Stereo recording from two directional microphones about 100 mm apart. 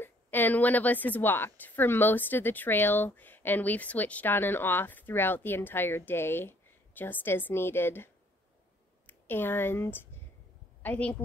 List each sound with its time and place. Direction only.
0.0 s a woman's voice: 20° left (ahead or behind)